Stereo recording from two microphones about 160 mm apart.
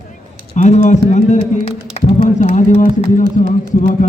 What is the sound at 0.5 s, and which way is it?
Speech, 45° left (ahead or behind).